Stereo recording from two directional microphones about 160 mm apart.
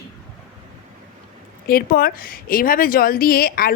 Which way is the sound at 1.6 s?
65° left (ahead or behind).